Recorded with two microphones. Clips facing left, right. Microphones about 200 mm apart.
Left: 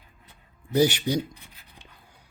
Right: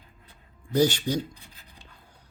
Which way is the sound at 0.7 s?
10° left (ahead or behind).